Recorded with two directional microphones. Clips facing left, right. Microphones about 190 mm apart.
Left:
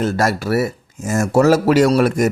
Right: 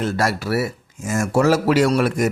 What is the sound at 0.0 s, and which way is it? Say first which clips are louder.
Speech: left 3 dB; 45° left (ahead or behind).